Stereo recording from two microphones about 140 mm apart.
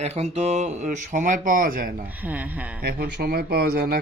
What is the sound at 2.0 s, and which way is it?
Speech, 10° right (ahead or behind).